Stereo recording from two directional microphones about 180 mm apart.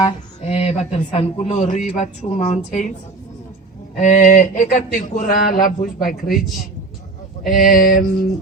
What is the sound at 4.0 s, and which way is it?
Speech, 45° left (ahead or behind).